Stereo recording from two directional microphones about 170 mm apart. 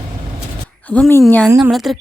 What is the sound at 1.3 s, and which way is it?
Speech, 10° left (ahead or behind).